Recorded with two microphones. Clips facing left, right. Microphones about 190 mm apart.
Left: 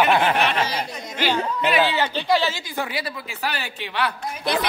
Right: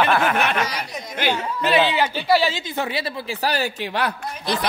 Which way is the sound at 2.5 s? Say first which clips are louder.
Right 3 dB; 25° right (ahead or behind).